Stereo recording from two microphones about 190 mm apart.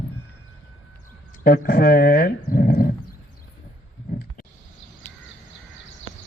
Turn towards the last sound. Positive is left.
turn(degrees=10)  # may be behind; listen again after turning